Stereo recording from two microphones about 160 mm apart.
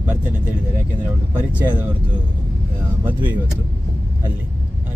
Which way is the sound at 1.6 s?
10° right (ahead or behind).